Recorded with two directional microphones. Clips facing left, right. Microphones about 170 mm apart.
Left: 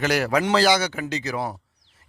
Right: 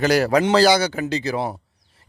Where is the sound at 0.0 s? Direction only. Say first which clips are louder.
Right 5 dB; 35° right (ahead or behind).